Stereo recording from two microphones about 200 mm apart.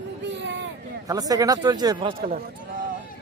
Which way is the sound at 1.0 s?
20° right (ahead or behind).